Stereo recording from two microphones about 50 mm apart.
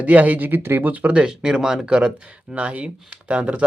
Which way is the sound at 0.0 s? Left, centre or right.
Right.